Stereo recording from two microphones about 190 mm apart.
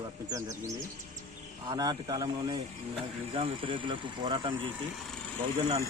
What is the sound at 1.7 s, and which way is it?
Speech, 20° right (ahead or behind).